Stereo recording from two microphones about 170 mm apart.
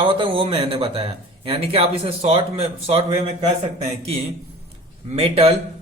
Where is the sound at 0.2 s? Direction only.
30° right (ahead or behind).